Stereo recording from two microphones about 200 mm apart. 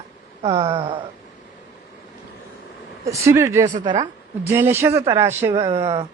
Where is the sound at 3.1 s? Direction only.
15° right (ahead or behind).